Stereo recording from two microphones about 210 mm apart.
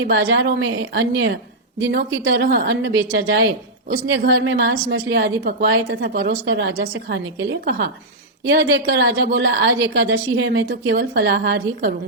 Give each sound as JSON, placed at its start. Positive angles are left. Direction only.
{"t": 0.1, "sound": "a woman's voice", "side_deg": -50}